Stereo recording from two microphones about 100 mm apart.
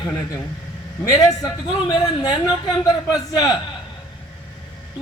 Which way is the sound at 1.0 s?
40° left (ahead or behind).